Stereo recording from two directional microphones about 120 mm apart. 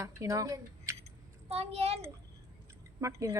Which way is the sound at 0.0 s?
25° right (ahead or behind).